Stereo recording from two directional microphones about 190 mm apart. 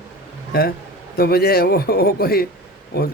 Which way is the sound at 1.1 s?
55° left (ahead or behind).